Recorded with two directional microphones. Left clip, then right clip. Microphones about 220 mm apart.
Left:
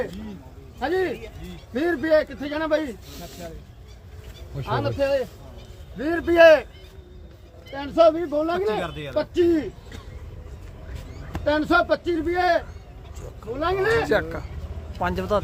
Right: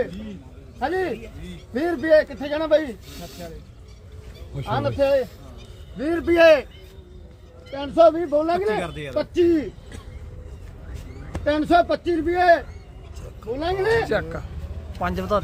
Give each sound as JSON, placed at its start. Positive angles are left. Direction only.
{"t": 0.8, "sound": "a man's voice", "side_deg": -5}
{"t": 4.6, "sound": "a man's voice", "side_deg": -10}
{"t": 7.8, "sound": "a man's voice", "side_deg": -5}
{"t": 11.3, "sound": "a man's voice", "side_deg": -10}
{"t": 14.1, "sound": "speech", "side_deg": 5}